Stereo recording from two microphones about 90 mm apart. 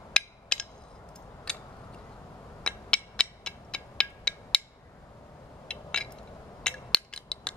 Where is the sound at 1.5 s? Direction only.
10° left (ahead or behind).